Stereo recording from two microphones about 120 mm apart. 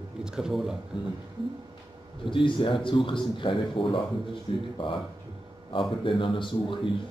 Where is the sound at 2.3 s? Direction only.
45° left (ahead or behind).